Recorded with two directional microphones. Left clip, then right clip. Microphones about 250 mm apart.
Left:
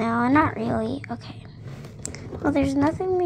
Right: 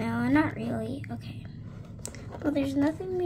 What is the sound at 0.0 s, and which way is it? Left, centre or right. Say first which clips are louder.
A woman's voice: left 7 dB; centre.